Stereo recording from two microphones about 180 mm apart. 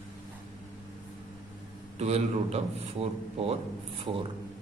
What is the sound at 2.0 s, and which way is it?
A man's voice, 35° right (ahead or behind).